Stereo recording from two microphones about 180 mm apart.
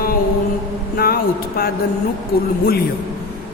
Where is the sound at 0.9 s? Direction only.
55° left (ahead or behind).